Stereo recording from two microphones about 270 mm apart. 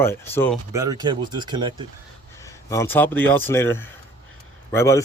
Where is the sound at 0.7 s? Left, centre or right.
Centre.